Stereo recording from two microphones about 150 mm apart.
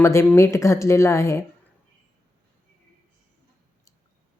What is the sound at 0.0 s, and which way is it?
Speech, 20° left (ahead or behind).